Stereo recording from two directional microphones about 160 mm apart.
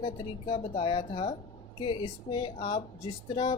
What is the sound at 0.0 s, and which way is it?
Speech, 35° left (ahead or behind).